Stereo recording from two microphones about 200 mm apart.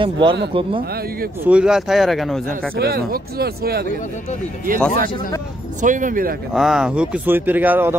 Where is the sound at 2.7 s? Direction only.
50° right (ahead or behind).